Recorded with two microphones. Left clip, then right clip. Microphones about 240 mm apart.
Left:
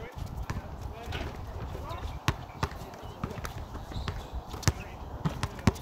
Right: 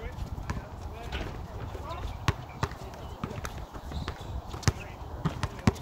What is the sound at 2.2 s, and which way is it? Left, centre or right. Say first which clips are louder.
Basketball bounce: even; left.